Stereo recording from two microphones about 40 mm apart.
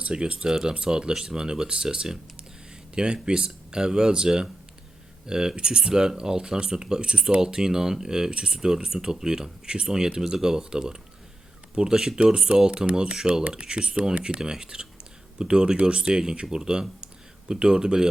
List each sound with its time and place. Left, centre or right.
0.0 s speech: right